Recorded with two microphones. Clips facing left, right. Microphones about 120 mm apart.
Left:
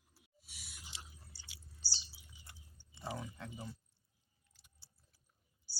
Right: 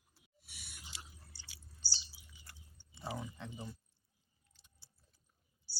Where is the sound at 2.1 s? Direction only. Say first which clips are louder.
Even; 30° left (ahead or behind).